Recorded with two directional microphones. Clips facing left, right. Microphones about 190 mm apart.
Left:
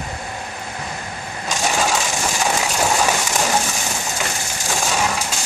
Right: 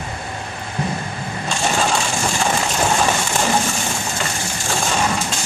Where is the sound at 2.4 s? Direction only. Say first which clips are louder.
Even; 5° left (ahead or behind).